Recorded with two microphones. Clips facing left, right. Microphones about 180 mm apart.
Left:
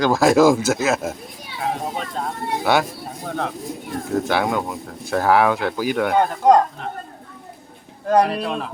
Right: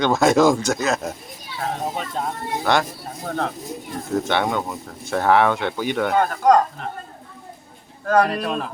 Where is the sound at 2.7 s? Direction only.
5° left (ahead or behind).